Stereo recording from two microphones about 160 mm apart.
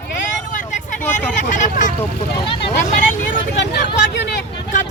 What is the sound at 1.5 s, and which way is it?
Speech, 50° left (ahead or behind).